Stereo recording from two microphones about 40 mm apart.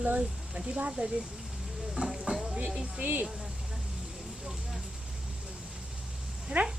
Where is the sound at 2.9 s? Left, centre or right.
Right.